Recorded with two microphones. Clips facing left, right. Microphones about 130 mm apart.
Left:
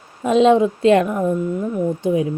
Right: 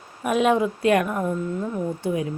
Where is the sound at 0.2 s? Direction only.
25° left (ahead or behind).